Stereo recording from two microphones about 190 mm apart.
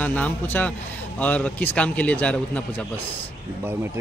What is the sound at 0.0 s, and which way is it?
A man's voice, 10° left (ahead or behind).